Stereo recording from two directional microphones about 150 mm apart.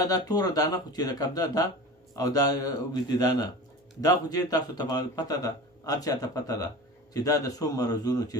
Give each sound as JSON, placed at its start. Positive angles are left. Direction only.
{"t": 0.0, "sound": "a man's voice", "side_deg": 25}